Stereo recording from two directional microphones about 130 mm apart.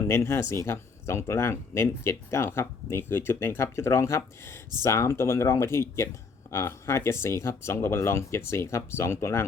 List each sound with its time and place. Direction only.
0.1 s speech: 20° left (ahead or behind)